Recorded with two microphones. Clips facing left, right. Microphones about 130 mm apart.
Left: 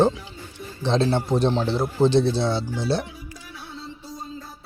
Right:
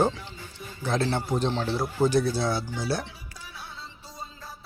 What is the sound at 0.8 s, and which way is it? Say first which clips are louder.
Speech: left 5 dB; 25° left (ahead or behind).